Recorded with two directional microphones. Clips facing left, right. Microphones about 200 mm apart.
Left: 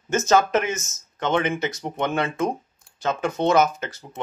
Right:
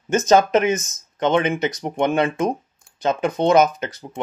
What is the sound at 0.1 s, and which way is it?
Speech, 15° right (ahead or behind).